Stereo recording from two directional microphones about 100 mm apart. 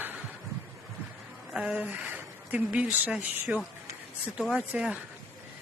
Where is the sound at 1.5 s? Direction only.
10° right (ahead or behind).